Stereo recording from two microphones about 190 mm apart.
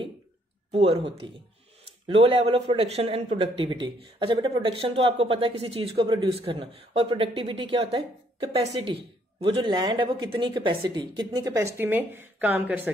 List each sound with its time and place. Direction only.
0.7 s speech: 30° right (ahead or behind)
5.9 s speech: 20° right (ahead or behind)